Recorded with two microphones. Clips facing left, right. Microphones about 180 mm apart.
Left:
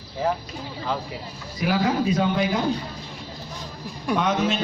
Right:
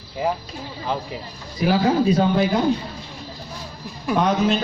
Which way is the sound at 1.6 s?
30° right (ahead or behind).